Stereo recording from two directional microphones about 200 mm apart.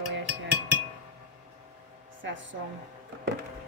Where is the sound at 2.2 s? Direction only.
70° right (ahead or behind).